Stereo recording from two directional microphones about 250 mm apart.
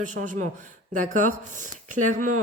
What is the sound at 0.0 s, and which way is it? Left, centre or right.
Speech, right.